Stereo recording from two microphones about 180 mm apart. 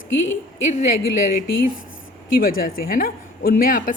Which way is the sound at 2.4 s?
55° left (ahead or behind).